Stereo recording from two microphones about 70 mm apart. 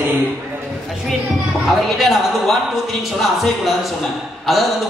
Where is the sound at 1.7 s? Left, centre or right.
Centre.